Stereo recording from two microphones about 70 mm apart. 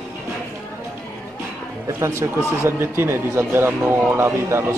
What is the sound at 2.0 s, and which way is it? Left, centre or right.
Speech, right.